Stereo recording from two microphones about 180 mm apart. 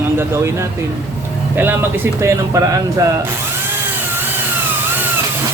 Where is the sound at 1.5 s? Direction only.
10° right (ahead or behind).